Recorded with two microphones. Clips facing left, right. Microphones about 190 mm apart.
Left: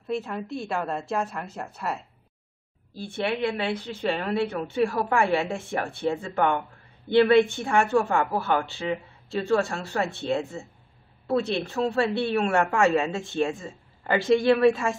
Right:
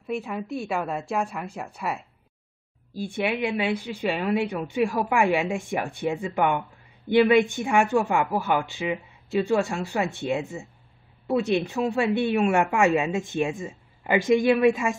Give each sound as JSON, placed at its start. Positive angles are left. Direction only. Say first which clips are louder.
{"t": 0.0, "sound": "a woman's voice", "louder": "even", "side_deg": -10}